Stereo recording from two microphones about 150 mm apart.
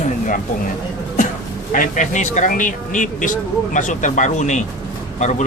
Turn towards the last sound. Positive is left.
turn(degrees=50)  # may be behind; listen again after turning